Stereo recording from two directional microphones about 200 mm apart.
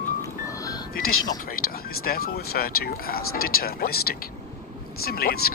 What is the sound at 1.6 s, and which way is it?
Speech, 50° left (ahead or behind).